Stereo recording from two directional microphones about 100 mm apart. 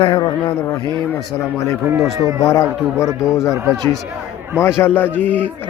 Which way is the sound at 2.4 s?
30° left (ahead or behind).